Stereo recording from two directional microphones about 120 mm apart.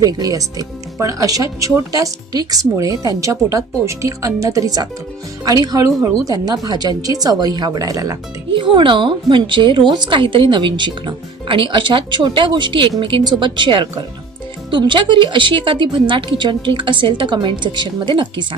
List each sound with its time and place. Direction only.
0.0 s a woman's voice: 30° right (ahead or behind)
8.5 s a woman's voice: 45° right (ahead or behind)